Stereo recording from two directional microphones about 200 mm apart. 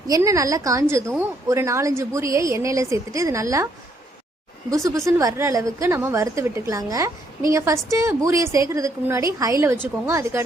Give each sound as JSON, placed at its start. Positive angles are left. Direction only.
{"t": 0.1, "sound": "a woman's voice", "side_deg": -15}
{"t": 4.7, "sound": "a woman's voice", "side_deg": -15}